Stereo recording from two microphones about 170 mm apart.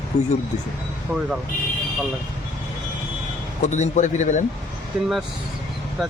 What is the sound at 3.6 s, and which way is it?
Speech, 45° left (ahead or behind).